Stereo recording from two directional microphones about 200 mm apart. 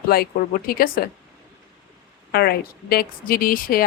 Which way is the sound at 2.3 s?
50° left (ahead or behind).